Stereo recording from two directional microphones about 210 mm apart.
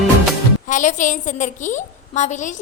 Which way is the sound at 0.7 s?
35° left (ahead or behind).